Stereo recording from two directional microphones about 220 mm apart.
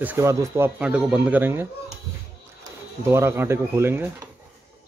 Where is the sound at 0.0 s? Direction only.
10° right (ahead or behind).